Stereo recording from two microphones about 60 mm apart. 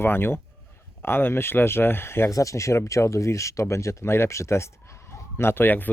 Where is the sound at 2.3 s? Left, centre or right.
Left.